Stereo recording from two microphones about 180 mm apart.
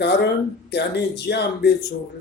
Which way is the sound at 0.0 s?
70° left (ahead or behind).